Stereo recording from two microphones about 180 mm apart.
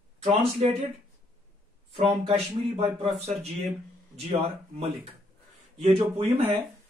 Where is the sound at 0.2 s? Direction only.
35° right (ahead or behind).